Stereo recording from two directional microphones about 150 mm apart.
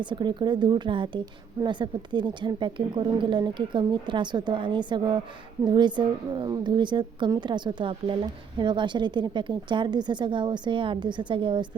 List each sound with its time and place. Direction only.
0.0 s a woman's voice: 30° right (ahead or behind)